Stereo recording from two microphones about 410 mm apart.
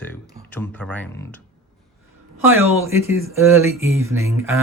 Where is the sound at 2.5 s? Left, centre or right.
Centre.